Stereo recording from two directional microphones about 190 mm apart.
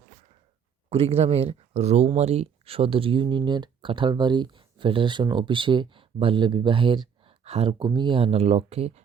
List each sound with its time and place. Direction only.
0.9 s speech: 30° right (ahead or behind)